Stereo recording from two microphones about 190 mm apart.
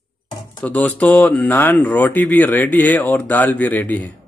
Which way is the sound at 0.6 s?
10° left (ahead or behind).